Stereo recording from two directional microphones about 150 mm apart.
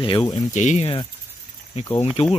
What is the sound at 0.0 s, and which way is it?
Speech, 35° left (ahead or behind).